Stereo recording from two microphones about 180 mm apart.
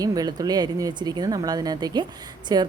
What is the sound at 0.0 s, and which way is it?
A woman's voice, 20° right (ahead or behind).